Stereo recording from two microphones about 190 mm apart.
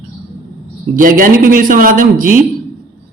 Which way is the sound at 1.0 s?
45° right (ahead or behind).